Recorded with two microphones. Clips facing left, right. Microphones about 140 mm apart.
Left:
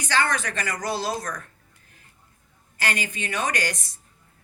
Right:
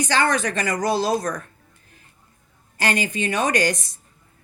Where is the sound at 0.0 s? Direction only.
20° right (ahead or behind).